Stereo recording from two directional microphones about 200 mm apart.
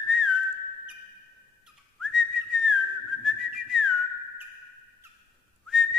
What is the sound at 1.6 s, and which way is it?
Whistling, centre (ahead or behind).